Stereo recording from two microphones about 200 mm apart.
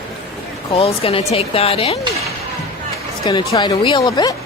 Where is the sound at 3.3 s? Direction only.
20° left (ahead or behind).